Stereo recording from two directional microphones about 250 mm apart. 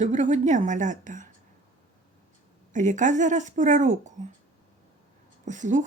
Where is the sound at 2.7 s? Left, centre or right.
Right.